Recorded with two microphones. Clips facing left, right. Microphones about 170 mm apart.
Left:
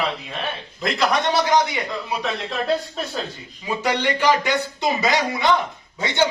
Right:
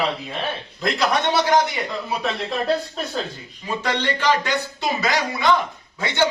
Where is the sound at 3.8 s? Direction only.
10° left (ahead or behind).